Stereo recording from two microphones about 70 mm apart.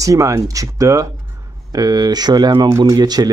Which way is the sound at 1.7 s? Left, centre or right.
Right.